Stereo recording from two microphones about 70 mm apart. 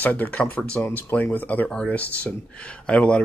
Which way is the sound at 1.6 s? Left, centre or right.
Centre.